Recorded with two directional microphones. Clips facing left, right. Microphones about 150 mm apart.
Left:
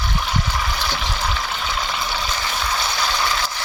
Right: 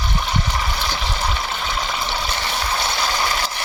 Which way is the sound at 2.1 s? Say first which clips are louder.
Right 1 dB; 25° right (ahead or behind).